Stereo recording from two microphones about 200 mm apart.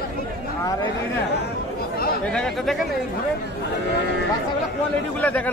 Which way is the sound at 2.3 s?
Centre (ahead or behind).